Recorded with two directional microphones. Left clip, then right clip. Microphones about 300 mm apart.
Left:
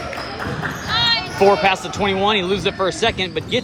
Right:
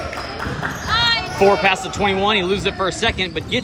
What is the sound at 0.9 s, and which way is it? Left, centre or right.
Basketball bounce, centre.